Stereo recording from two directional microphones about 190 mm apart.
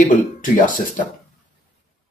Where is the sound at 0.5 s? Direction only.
45° left (ahead or behind).